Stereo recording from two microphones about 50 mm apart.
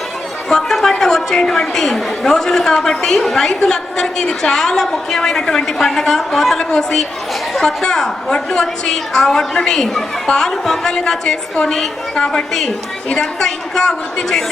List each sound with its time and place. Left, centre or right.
0.4 s a woman's voice: centre